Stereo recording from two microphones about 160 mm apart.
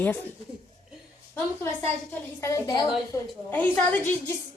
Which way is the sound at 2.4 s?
20° left (ahead or behind).